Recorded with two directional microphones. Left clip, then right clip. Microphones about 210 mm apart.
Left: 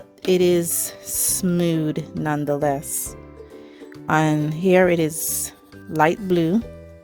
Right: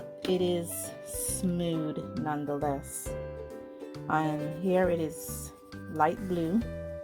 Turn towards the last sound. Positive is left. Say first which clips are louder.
# left 9 dB
turn(degrees=50)  # may be behind; listen again after turning